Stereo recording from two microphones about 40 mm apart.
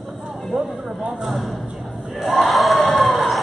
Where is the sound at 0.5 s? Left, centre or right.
Centre.